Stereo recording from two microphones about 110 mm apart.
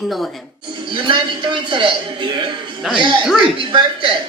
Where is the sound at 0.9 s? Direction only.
50° right (ahead or behind).